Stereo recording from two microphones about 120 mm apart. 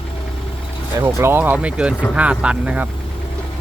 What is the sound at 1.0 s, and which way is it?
Speech, 20° right (ahead or behind).